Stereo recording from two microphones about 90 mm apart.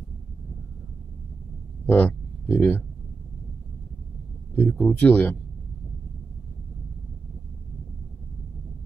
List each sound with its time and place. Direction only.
1.9 s speech: 20° left (ahead or behind)
4.6 s speech: 20° left (ahead or behind)